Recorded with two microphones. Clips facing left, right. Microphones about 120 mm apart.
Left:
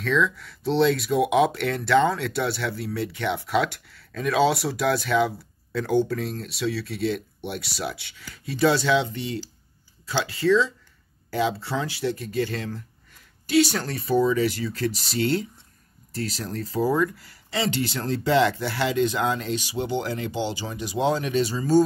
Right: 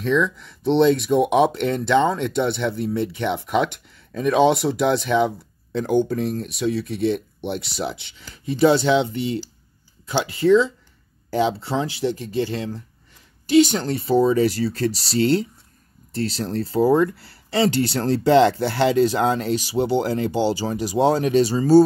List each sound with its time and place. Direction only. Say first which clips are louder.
0.0 s speech: right 3 dB; 20° right (ahead or behind); by 21.8 s 35° right (ahead or behind)